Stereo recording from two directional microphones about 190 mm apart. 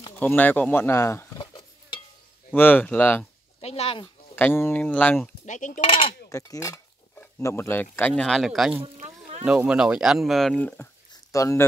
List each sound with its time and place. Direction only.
0.2 s cutlery: 10° left (ahead or behind); by 2.0 s 25° left (ahead or behind)
2.5 s speech: 10° left (ahead or behind)
3.6 s speech: 30° left (ahead or behind)
4.4 s speech: 10° left (ahead or behind)
5.4 s speech: 40° left (ahead or behind)
5.9 s cutlery: 30° left (ahead or behind)
6.2 s speech: 15° left (ahead or behind); by 8.8 s 5° right (ahead or behind)
8.9 s a sound: 35° right (ahead or behind)
9.4 s speech: 5° right (ahead or behind)
11.3 s speech: 15° left (ahead or behind)